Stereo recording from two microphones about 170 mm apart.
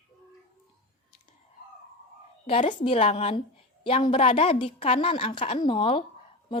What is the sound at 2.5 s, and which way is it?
A woman's voice, 35° left (ahead or behind).